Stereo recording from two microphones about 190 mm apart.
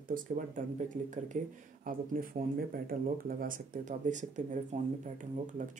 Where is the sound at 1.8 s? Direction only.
50° right (ahead or behind).